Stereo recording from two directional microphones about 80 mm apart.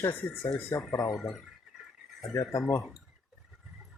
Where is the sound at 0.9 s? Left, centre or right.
Left.